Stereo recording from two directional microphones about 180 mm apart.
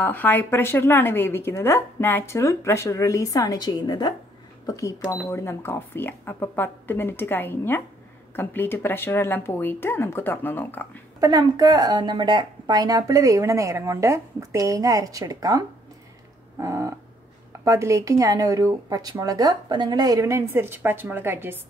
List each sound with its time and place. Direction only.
0.0 s speech: 10° left (ahead or behind)
11.1 s speech: 20° right (ahead or behind)
16.5 s dog: 15° right (ahead or behind)
17.5 s speech: 15° right (ahead or behind)